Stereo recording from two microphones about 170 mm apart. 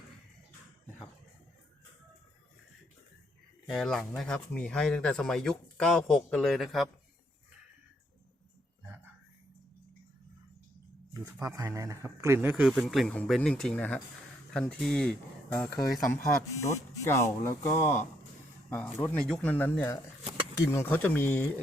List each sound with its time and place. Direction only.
3.7 s speech: centre (ahead or behind)
11.1 s speech: 20° right (ahead or behind)
12.6 s speech: centre (ahead or behind)
16.6 s speech: 20° left (ahead or behind)
18.9 s speech: 10° left (ahead or behind)